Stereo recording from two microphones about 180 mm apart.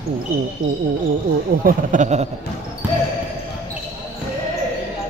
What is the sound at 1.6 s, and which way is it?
Speech, 50° right (ahead or behind).